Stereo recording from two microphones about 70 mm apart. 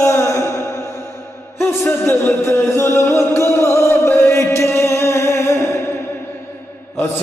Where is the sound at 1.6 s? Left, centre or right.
Left.